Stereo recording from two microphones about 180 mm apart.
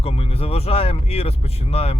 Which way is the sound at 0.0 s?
35° left (ahead or behind).